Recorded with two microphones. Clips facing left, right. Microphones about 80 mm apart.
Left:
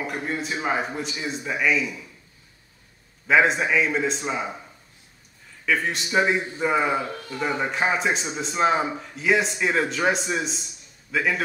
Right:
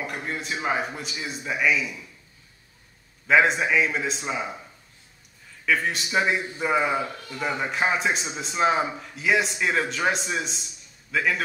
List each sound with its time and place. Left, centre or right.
0.0 s a man's voice: centre
3.3 s a man's voice: centre
5.7 s a man's voice: centre